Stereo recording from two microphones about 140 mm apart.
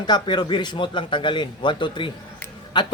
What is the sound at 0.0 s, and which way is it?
Speech, 30° left (ahead or behind).